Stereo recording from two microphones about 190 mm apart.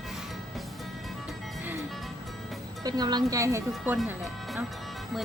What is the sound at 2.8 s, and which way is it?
Speech, 20° right (ahead or behind).